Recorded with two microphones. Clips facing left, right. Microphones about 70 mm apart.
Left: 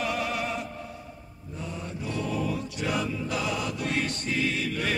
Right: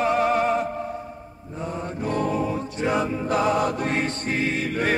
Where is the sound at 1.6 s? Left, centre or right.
Right.